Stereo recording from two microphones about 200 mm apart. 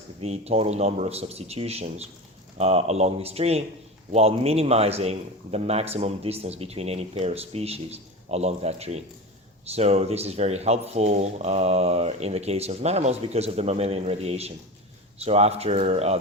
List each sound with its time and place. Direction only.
0.2 s a man's voice: 30° right (ahead or behind)